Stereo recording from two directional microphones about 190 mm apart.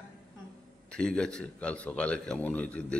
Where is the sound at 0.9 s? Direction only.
5° left (ahead or behind).